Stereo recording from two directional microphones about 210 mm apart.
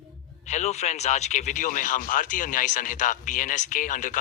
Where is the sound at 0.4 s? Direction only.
35° left (ahead or behind).